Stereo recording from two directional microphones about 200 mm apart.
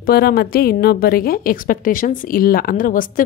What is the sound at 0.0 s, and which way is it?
A woman's voice, 50° left (ahead or behind).